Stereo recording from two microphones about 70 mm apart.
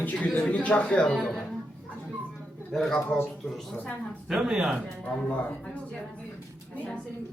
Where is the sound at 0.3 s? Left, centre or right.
Centre.